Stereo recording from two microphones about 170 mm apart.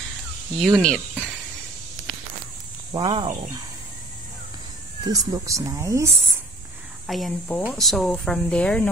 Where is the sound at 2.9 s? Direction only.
30° right (ahead or behind).